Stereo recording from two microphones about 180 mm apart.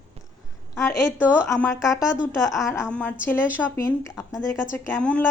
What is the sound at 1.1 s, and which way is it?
Speech, 5° right (ahead or behind).